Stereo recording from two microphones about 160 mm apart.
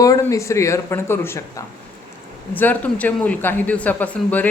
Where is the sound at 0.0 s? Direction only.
20° left (ahead or behind).